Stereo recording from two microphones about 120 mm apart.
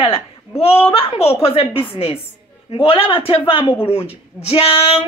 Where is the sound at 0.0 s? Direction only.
55° left (ahead or behind).